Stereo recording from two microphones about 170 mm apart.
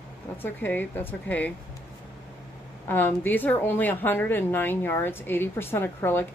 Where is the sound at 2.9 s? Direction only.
10° left (ahead or behind).